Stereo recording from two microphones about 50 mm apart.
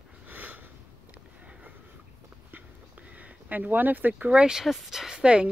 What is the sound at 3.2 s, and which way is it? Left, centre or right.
Speech, right.